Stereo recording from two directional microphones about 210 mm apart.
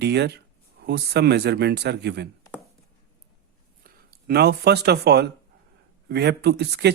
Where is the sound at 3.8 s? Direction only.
45° right (ahead or behind).